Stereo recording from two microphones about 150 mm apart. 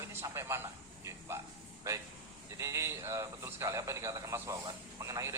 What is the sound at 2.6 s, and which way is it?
A man's voice, 20° right (ahead or behind).